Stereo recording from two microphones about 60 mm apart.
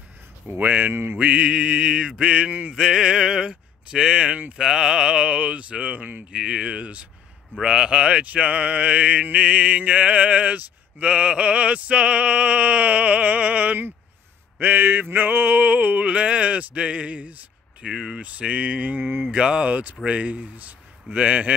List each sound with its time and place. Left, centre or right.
0.5 s mantra: right
1.1 s speech: right
6.3 s speech: centre
7.6 s mantra: centre
19.3 s mantra: centre